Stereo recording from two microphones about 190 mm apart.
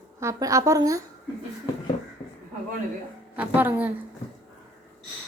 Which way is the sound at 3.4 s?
10° right (ahead or behind).